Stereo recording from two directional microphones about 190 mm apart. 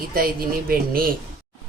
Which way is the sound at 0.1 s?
50° right (ahead or behind).